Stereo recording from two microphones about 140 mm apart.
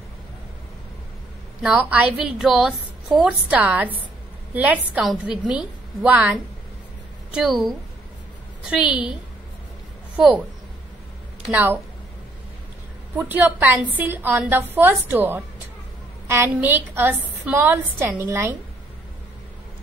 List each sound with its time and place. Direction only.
1.6 s a woman's voice: 5° right (ahead or behind)
7.3 s a woman's voice: 5° right (ahead or behind)
8.6 s a woman's voice: 5° right (ahead or behind)
10.2 s a woman's voice: 5° right (ahead or behind)
11.5 s a woman's voice: 15° right (ahead or behind)
13.1 s a woman's voice: 15° right (ahead or behind)